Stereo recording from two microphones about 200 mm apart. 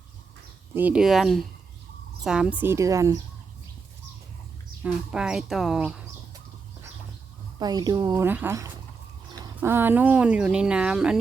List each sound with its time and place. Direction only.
0.7 s speech: 10° right (ahead or behind)
4.8 s speech: 5° right (ahead or behind)
7.6 s speech: 20° right (ahead or behind); by 11.2 s 5° right (ahead or behind)